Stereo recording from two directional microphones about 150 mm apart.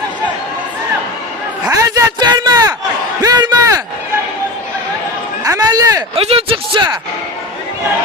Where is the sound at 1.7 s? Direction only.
25° right (ahead or behind).